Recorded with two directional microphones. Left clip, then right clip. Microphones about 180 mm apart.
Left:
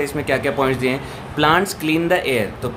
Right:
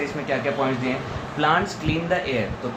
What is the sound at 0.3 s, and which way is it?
A man's voice, 65° left (ahead or behind).